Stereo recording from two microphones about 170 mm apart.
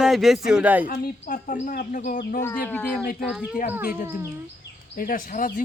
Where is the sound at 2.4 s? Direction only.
10° left (ahead or behind).